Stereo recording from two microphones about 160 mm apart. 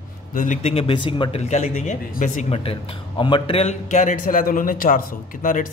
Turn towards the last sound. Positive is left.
turn(degrees=60)  # may be behind; listen again after turning